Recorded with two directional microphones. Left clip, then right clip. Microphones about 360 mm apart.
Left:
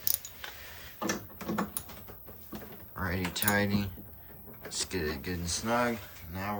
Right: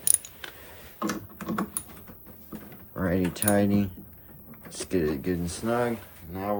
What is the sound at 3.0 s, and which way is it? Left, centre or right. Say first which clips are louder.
Speech: right 6 dB; centre.